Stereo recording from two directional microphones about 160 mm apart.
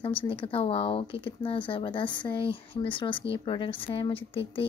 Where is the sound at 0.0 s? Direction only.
35° left (ahead or behind).